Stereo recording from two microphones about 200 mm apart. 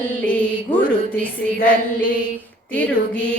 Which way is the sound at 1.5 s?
45° left (ahead or behind).